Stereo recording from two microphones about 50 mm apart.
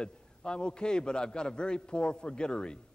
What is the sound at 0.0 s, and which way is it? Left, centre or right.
A man's voice, centre.